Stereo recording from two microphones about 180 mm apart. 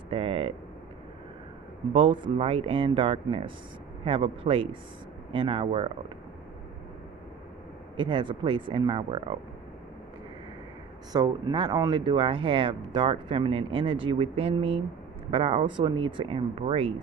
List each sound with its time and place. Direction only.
0.1 s a sound: 30° right (ahead or behind)
2.0 s speech: 30° right (ahead or behind)
7.9 s speech: 25° right (ahead or behind)
11.1 s speech: 25° right (ahead or behind)